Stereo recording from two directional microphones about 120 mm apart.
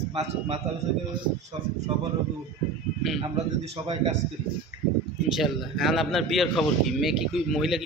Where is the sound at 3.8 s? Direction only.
60° right (ahead or behind).